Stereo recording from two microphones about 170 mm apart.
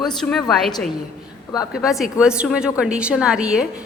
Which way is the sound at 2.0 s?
5° right (ahead or behind).